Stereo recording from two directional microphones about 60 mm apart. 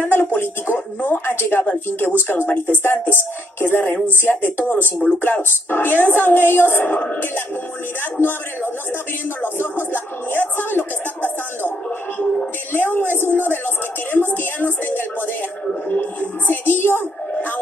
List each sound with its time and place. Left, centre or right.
0.0 s speech: left
9.4 s speech: left
12.7 s speech: left
13.1 s speech: right
14.1 s speech: left